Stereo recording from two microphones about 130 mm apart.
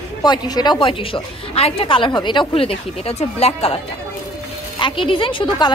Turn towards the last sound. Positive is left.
turn(degrees=35)  # may be behind; listen again after turning